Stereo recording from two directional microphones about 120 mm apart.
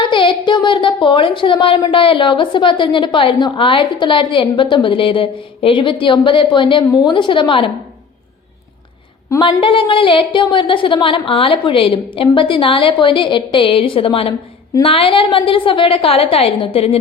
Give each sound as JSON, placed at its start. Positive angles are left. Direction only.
{"t": 0.0, "sound": "speech", "side_deg": 40}
{"t": 9.4, "sound": "speech", "side_deg": 45}